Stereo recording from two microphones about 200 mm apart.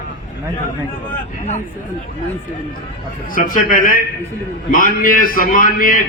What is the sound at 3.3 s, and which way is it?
A man's voice, 45° left (ahead or behind).